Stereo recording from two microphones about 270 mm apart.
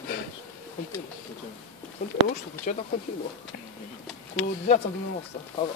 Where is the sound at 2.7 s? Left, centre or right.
Left.